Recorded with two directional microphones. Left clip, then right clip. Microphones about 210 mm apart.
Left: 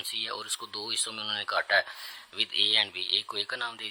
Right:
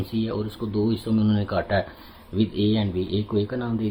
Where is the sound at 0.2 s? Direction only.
40° left (ahead or behind).